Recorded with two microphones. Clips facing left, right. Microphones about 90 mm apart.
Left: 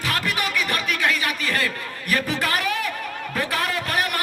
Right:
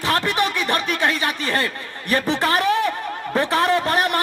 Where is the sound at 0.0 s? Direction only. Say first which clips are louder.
Right 5 dB; 30° right (ahead or behind).